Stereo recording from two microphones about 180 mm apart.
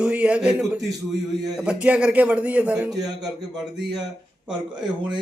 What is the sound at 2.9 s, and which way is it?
Speech, 20° right (ahead or behind).